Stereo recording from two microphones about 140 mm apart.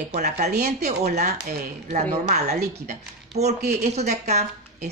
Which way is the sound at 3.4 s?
50° right (ahead or behind).